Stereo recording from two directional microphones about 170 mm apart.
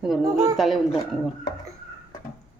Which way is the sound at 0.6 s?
Centre (ahead or behind).